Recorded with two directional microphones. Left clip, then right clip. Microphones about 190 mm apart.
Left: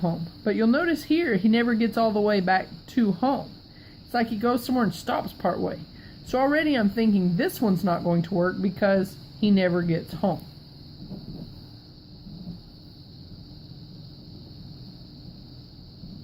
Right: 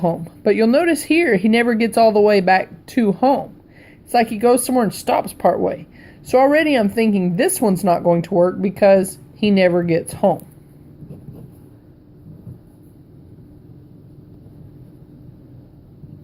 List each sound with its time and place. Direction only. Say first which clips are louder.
0.0 s speech: right 10 dB; 30° right (ahead or behind)